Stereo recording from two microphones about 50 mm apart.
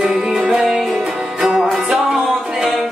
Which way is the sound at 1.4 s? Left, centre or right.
Centre.